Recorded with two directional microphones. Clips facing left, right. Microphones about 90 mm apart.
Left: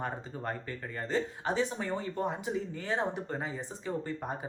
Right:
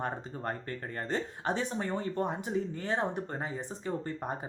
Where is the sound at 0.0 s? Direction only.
40° right (ahead or behind).